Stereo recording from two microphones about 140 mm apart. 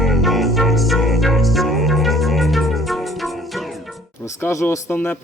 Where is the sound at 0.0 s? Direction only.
Centre (ahead or behind).